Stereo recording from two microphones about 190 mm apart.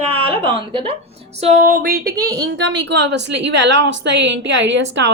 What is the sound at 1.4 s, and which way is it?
Speech, 40° right (ahead or behind).